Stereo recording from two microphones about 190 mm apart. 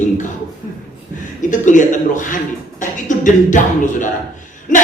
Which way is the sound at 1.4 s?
40° left (ahead or behind).